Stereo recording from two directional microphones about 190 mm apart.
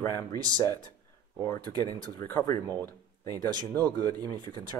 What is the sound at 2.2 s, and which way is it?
Speech, 15° left (ahead or behind).